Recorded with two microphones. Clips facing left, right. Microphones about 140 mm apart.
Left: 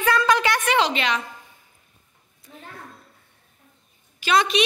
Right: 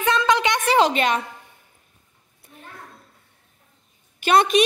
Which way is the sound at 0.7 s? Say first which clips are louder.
Right 7 dB; 45° right (ahead or behind).